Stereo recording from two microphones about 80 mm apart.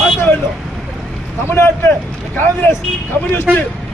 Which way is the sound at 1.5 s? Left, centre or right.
Left.